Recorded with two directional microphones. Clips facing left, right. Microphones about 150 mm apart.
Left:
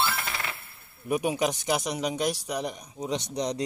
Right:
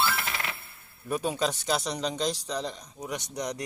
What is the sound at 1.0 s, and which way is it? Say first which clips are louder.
Speech: left 2 dB; 15° left (ahead or behind).